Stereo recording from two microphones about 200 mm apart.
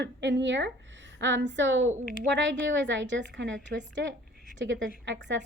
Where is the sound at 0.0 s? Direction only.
60° right (ahead or behind).